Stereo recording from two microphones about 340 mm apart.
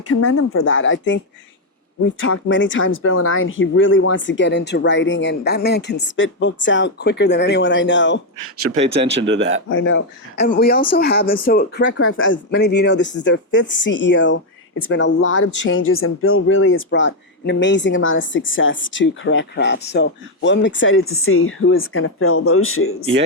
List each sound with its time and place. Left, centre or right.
0.1 s speech: left
8.7 s speech: right
9.6 s speech: left